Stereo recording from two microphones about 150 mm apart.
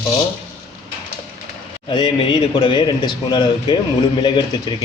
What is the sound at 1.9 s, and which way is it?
A man's voice, 30° left (ahead or behind).